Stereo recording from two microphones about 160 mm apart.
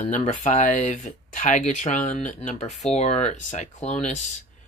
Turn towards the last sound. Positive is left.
turn(degrees=45)  # may be behind; listen again after turning